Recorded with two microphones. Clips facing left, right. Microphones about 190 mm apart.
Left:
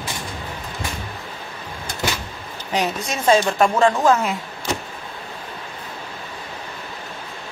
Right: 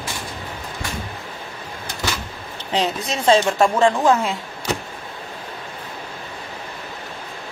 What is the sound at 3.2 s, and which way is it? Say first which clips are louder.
Speech: right 1 dB; 30° right (ahead or behind).